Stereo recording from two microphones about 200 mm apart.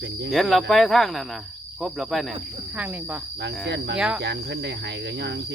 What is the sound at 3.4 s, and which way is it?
Speech, 60° right (ahead or behind).